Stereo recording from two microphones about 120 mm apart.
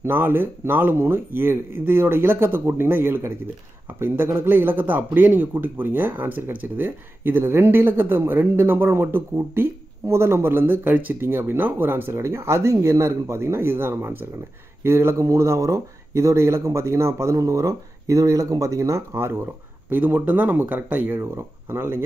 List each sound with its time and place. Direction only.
0.0 s speech: 20° right (ahead or behind)